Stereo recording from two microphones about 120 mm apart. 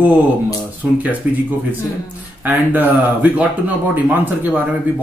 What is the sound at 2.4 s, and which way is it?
Speech, 15° right (ahead or behind).